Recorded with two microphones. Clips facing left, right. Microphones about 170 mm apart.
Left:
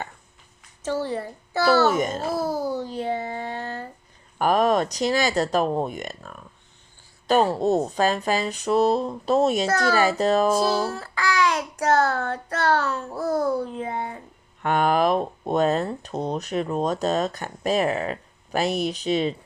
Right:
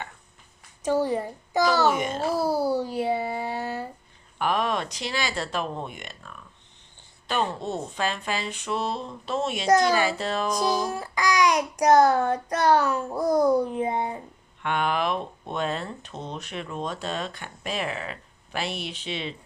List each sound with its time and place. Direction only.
0.8 s child singing: 15° right (ahead or behind)
2.0 s speech: 40° left (ahead or behind)
2.6 s a child's voice: 10° right (ahead or behind)
4.4 s speech: 40° left (ahead or behind)
9.6 s child singing: 15° right (ahead or behind)
9.9 s speech: 40° left (ahead or behind)
10.8 s child singing: 15° right (ahead or behind)
14.6 s speech: 40° left (ahead or behind)